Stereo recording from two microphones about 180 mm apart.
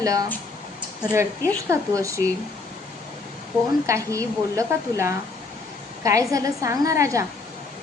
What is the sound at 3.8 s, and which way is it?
A woman's voice, 15° right (ahead or behind).